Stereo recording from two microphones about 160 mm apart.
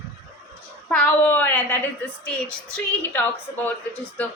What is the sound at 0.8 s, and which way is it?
A woman's voice, 5° left (ahead or behind).